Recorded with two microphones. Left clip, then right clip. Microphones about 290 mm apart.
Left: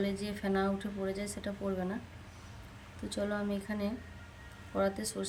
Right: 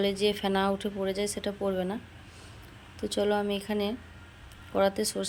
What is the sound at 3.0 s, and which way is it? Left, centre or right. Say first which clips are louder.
Speech: right 9 dB; centre.